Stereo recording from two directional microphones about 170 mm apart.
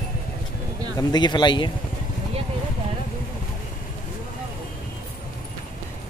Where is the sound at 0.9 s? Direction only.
25° left (ahead or behind).